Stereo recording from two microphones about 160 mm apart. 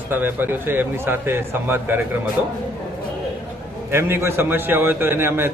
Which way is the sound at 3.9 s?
15° right (ahead or behind).